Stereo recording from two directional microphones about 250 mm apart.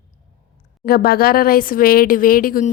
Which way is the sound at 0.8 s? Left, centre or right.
Left.